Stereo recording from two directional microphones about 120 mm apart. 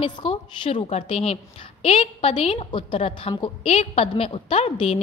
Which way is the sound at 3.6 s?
60° left (ahead or behind).